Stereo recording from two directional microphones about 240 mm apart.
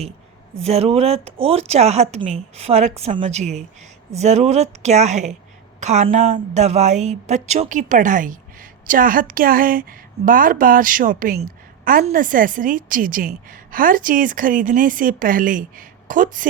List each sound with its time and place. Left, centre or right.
0.6 s a woman's voice: right